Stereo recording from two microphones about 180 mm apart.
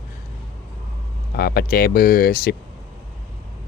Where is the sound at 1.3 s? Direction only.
60° left (ahead or behind).